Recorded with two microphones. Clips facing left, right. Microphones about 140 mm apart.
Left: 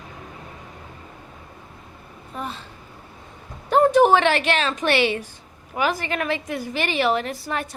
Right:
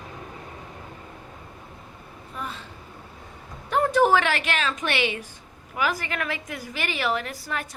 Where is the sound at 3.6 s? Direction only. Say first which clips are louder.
Left 5 dB; 30° left (ahead or behind).